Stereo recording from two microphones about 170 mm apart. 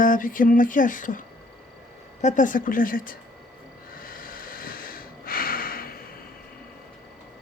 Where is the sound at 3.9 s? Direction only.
55° left (ahead or behind).